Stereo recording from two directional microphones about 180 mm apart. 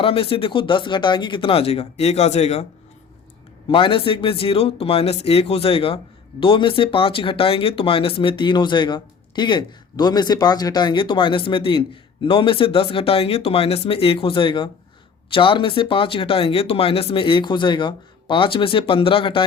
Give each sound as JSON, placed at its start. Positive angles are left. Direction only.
{"t": 0.0, "sound": "speech", "side_deg": 30}
{"t": 3.7, "sound": "speech", "side_deg": 30}